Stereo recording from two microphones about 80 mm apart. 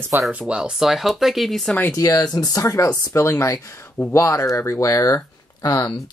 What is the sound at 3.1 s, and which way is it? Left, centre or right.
Speech, left.